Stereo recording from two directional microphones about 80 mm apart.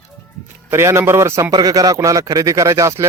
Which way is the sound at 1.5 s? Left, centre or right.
Right.